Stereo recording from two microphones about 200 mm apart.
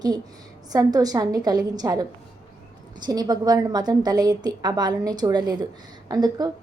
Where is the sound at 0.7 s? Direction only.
20° right (ahead or behind).